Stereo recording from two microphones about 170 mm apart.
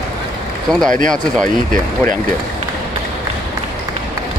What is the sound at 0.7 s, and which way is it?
Speech, 5° left (ahead or behind).